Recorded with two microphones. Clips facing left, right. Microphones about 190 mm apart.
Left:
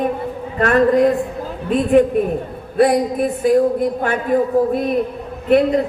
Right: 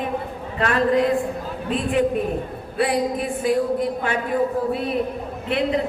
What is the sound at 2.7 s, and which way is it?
Speech, 45° left (ahead or behind).